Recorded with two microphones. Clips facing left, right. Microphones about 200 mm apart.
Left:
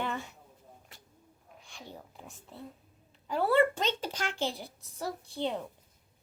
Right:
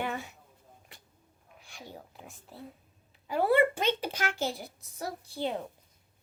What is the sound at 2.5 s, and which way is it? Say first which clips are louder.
A woman's voice: even; 5° right (ahead or behind).